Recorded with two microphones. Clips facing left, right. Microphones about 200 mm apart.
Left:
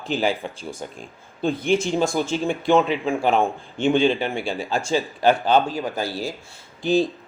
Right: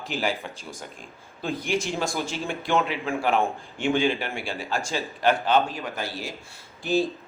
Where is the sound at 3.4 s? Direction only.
20° left (ahead or behind).